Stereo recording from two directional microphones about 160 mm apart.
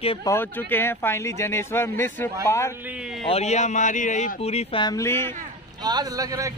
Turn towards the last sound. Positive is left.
turn(degrees=-25)  # may be behind; listen again after turning